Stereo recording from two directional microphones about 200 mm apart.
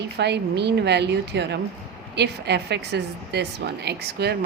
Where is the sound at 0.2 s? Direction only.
55° right (ahead or behind).